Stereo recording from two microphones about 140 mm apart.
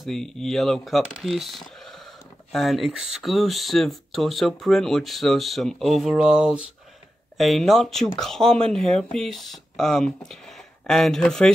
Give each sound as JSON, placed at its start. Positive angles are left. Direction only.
{"t": 0.0, "sound": "speech", "side_deg": 5}